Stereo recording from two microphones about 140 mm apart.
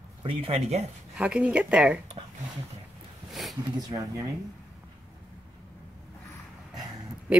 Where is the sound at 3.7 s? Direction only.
30° right (ahead or behind).